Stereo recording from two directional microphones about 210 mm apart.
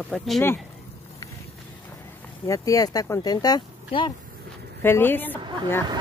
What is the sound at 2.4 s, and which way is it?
Speech, 15° left (ahead or behind).